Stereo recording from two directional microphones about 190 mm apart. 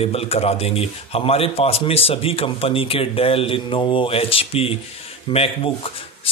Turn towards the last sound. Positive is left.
turn(degrees=30)  # may be behind; listen again after turning